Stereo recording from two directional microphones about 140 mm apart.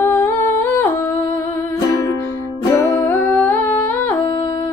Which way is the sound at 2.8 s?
20° left (ahead or behind).